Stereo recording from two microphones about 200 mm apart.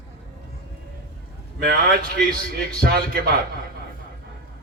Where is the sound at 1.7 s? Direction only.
50° right (ahead or behind).